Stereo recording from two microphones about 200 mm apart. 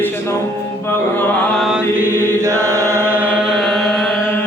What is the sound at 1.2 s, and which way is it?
Chant, centre (ahead or behind).